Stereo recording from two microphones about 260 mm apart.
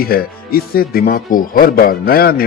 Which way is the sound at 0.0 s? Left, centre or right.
Left.